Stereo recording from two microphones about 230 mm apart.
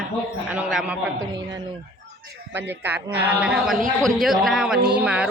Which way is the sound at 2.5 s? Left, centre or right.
Centre.